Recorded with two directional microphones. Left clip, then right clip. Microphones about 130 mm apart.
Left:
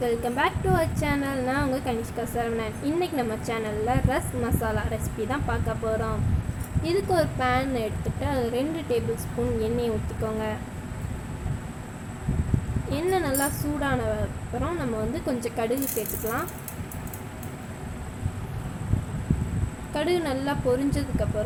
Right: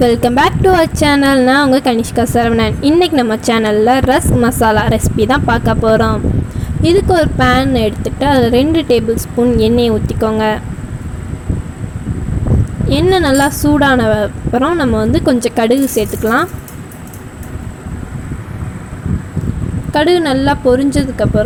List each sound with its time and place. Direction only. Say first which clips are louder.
0.0 s a woman's voice: right 14 dB; 65° right (ahead or behind)
12.9 s a woman's voice: right 15 dB; 55° right (ahead or behind)
19.9 s a woman's voice: right 15 dB; 50° right (ahead or behind)